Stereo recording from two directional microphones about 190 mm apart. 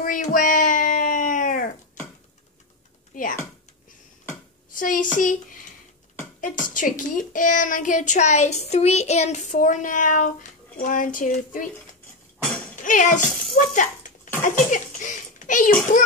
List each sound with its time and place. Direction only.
0.0 s a sound: 45° left (ahead or behind)
3.1 s typing: 45° left (ahead or behind)
4.7 s a woman's voice: 45° left (ahead or behind)
12.8 s a child's voice: 40° left (ahead or behind)